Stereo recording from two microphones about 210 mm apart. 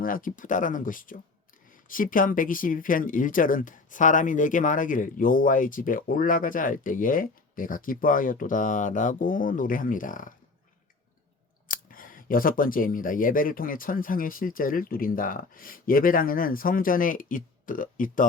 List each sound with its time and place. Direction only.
0.0 s speech: 40° left (ahead or behind)
11.7 s speech: 40° left (ahead or behind)